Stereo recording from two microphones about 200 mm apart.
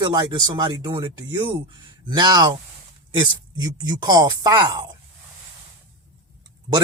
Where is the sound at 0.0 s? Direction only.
20° right (ahead or behind).